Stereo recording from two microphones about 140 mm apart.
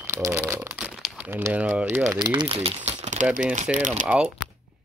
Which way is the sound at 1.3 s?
20° right (ahead or behind).